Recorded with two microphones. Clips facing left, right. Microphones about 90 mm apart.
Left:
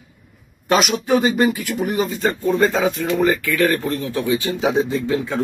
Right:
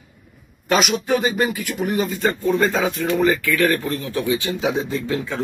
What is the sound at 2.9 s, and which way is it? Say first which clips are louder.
Speech: left 1 dB; 25° left (ahead or behind).